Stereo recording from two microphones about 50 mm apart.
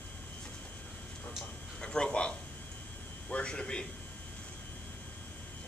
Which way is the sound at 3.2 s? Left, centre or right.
Left.